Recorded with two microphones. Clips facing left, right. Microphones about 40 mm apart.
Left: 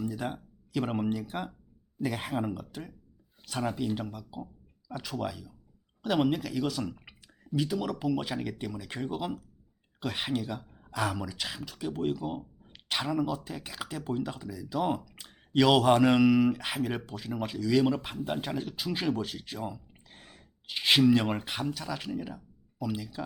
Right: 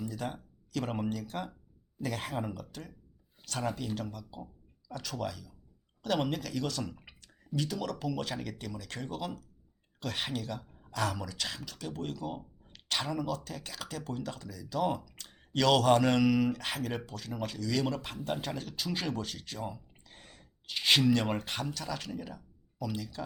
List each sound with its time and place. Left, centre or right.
0.0 s speech: centre